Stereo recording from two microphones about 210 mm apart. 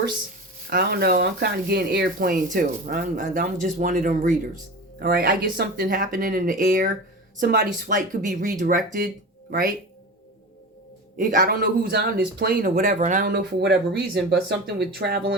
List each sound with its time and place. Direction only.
0.7 s speech: 50° right (ahead or behind)
11.2 s speech: 40° right (ahead or behind)
13.3 s speech: 50° right (ahead or behind)